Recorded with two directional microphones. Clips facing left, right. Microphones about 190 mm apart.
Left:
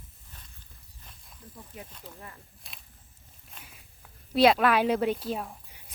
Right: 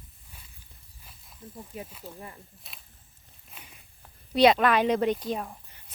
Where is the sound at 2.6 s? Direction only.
Centre (ahead or behind).